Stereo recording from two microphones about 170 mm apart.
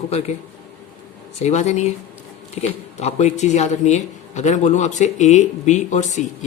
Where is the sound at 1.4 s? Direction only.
40° left (ahead or behind).